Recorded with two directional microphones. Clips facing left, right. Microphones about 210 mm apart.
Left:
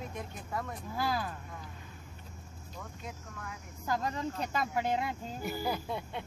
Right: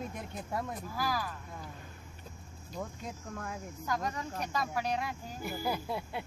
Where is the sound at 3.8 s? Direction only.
30° left (ahead or behind).